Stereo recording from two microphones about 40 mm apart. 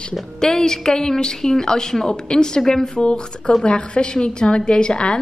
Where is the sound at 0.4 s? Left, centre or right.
Centre.